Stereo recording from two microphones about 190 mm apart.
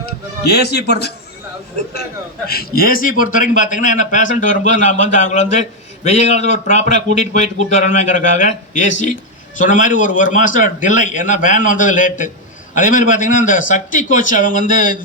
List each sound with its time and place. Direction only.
0.0 s a man's voice: 60° left (ahead or behind)
2.5 s a man's voice: 50° left (ahead or behind)